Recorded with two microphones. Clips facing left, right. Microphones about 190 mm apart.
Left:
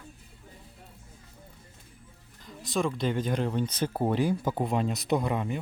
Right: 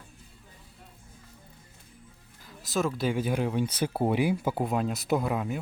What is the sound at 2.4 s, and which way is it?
Speech, centre (ahead or behind).